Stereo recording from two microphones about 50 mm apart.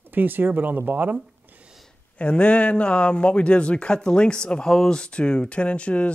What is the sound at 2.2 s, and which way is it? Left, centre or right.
Speech, left.